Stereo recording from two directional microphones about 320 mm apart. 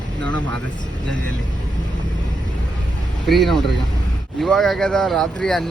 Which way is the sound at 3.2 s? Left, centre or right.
Centre.